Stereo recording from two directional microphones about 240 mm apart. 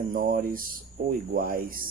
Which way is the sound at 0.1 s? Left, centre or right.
Right.